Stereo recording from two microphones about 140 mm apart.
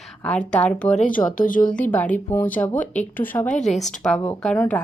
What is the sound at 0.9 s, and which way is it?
Speech, 70° left (ahead or behind).